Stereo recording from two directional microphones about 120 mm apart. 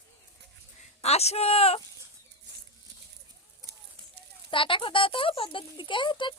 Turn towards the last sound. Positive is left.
turn(degrees=40)  # may be behind; listen again after turning